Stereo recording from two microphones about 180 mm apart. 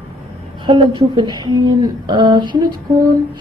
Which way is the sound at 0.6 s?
25° right (ahead or behind).